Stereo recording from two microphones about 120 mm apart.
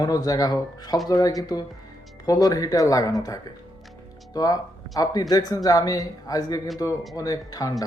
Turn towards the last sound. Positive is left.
turn(degrees=30)  # may be behind; listen again after turning